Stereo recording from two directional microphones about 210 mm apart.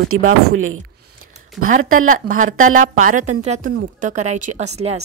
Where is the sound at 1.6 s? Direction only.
40° right (ahead or behind).